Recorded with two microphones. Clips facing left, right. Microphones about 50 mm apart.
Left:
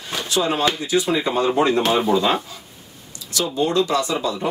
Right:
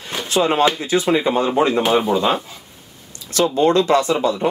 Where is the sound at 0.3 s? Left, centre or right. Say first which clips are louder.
Right 4 dB; right; by 2.3 s centre.